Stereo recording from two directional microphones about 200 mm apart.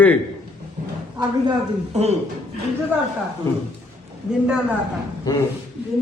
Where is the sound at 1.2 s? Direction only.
20° right (ahead or behind).